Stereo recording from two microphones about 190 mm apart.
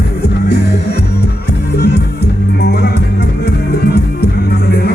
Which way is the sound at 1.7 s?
60° left (ahead or behind).